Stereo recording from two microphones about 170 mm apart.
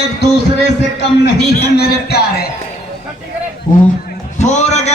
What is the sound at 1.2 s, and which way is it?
A man's voice, 70° left (ahead or behind).